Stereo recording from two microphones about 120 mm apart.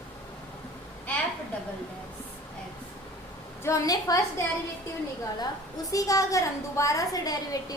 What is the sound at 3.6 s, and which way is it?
Speech, 30° left (ahead or behind).